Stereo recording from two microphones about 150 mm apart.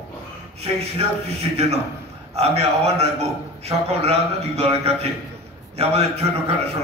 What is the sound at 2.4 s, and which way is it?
A man's voice, 45° right (ahead or behind).